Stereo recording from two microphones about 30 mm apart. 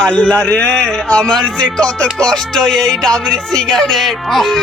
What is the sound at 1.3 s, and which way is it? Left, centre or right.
Music, left.